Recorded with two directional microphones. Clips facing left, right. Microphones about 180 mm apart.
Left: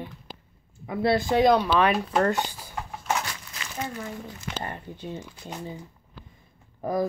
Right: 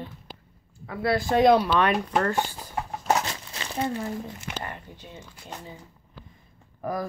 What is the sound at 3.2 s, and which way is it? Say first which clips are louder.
Crumpling: right 4 dB; 30° right (ahead or behind).